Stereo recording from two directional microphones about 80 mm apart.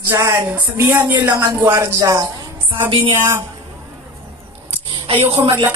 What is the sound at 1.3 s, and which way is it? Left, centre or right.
Speech, right.